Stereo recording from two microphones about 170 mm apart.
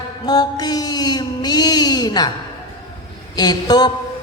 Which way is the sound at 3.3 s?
25° left (ahead or behind).